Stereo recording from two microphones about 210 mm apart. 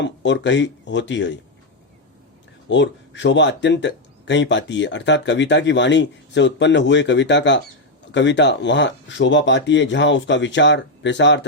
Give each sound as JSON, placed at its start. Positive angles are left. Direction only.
{"t": 0.0, "sound": "speech", "side_deg": 60}
{"t": 2.6, "sound": "speech", "side_deg": 60}